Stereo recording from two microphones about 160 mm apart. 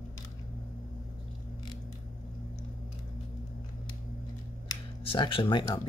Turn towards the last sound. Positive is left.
turn(degrees=30)  # may be behind; listen again after turning